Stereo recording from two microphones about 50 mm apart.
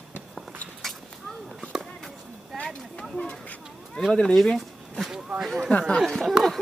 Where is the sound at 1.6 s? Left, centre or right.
Centre.